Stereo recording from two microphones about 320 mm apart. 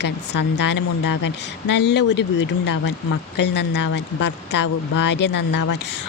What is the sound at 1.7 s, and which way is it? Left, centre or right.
Speech, left.